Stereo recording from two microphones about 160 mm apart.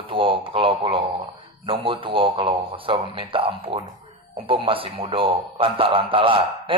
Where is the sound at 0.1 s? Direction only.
35° right (ahead or behind).